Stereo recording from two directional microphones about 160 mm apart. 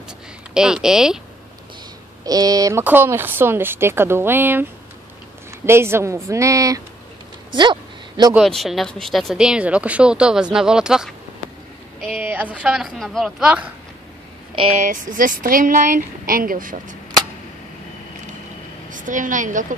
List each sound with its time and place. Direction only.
0.6 s speech: 5° right (ahead or behind)
2.2 s speech: 25° right (ahead or behind)
5.7 s a woman's voice: 15° right (ahead or behind)
7.5 s a sound: 30° right (ahead or behind)
8.4 s speech: centre (ahead or behind)
14.5 s speech: 35° right (ahead or behind)
14.8 s speech: 55° right (ahead or behind)
18.9 s a woman's voice: 55° right (ahead or behind)